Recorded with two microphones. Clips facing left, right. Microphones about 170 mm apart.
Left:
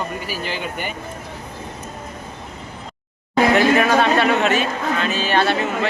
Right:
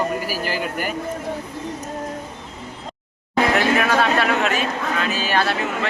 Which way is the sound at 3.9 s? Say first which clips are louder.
Left 2 dB; centre (ahead or behind).